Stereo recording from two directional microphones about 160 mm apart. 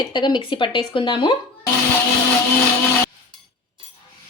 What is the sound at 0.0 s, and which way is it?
Speech, 25° left (ahead or behind).